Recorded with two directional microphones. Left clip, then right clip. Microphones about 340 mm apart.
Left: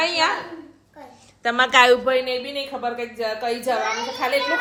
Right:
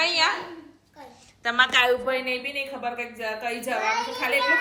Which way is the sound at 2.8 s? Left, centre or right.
Centre.